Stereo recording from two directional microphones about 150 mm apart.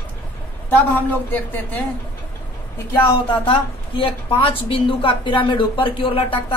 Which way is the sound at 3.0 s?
35° left (ahead or behind).